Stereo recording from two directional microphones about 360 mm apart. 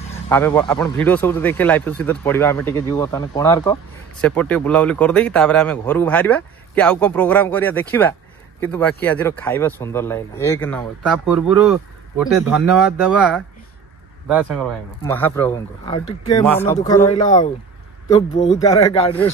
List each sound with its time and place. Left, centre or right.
0.3 s speech: centre
14.2 s a man's voice: centre